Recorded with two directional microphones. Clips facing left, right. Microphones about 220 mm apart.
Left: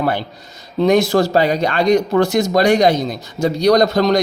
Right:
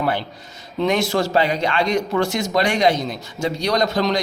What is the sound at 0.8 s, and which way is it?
Speech, 40° left (ahead or behind).